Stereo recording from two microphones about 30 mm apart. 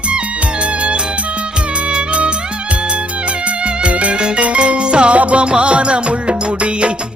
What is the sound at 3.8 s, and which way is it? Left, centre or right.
Music, right.